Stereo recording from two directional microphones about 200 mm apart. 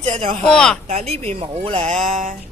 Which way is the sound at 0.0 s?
25° right (ahead or behind).